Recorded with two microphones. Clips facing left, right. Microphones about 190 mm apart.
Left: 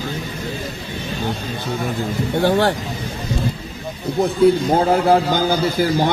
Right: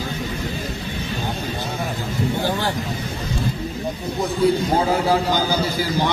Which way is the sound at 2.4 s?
60° left (ahead or behind).